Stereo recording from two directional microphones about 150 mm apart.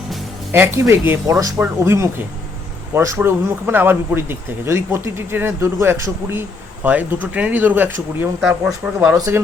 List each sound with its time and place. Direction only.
0.5 s a man's voice: 15° right (ahead or behind)
8.4 s speech: 5° right (ahead or behind)